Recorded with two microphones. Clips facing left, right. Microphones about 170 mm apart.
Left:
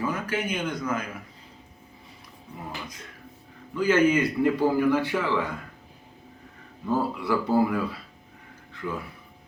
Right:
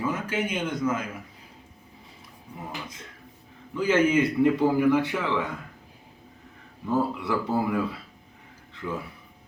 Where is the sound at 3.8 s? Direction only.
25° right (ahead or behind).